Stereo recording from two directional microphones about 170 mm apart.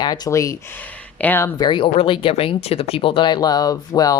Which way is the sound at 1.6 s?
30° left (ahead or behind).